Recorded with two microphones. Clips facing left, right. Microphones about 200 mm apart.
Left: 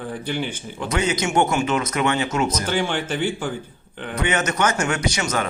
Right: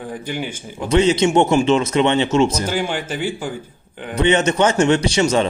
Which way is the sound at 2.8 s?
10° right (ahead or behind).